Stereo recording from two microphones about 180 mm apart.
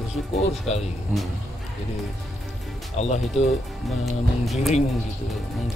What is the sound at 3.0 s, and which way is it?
Speech, 40° left (ahead or behind).